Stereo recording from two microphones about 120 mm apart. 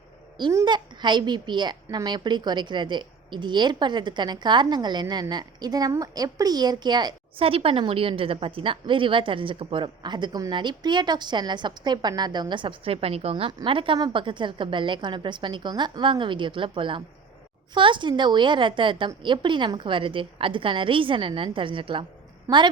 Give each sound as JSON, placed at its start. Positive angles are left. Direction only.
{"t": 0.6, "sound": "a woman's voice", "side_deg": -40}
{"t": 7.4, "sound": "a woman's voice", "side_deg": -50}